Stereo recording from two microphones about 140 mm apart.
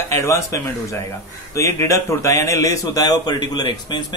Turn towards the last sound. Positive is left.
turn(degrees=30)  # may be behind; listen again after turning